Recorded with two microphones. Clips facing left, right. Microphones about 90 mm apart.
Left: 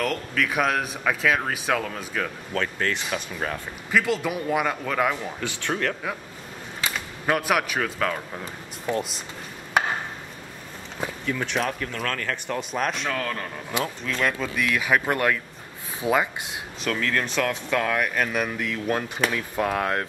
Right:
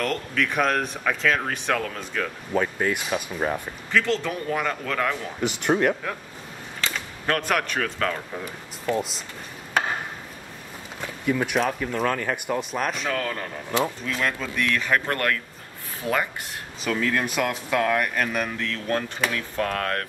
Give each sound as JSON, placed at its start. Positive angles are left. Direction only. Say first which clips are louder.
{"t": 0.0, "sound": "speech", "louder": "even", "side_deg": 0}
{"t": 2.5, "sound": "speech", "louder": "right 3 dB", "side_deg": -15}
{"t": 3.9, "sound": "speech", "louder": "even", "side_deg": 10}
{"t": 5.4, "sound": "speech", "louder": "right 9 dB", "side_deg": -15}
{"t": 6.8, "sound": "speech", "louder": "even", "side_deg": 10}
{"t": 8.9, "sound": "speech", "louder": "right 1 dB", "side_deg": 15}
{"t": 11.2, "sound": "speech", "louder": "right 4 dB", "side_deg": -10}
{"t": 12.5, "sound": "speech", "louder": "even", "side_deg": 0}
{"t": 16.8, "sound": "speech", "louder": "right 1 dB", "side_deg": -5}